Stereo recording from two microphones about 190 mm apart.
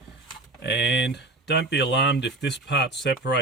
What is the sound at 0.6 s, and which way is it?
Speech, 65° left (ahead or behind).